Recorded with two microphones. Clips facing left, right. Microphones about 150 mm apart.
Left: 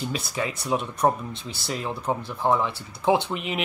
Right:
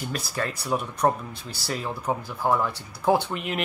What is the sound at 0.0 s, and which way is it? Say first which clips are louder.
Speech: left 1 dB; centre (ahead or behind).